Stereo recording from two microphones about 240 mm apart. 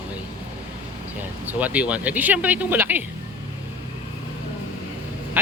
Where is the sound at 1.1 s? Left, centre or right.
Centre.